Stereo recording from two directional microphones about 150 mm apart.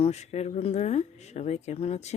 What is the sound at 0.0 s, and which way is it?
Speech, 50° left (ahead or behind).